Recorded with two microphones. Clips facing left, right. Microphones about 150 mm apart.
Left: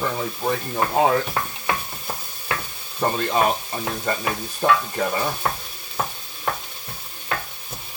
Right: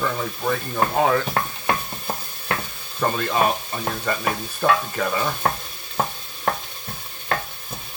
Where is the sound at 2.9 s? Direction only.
25° left (ahead or behind).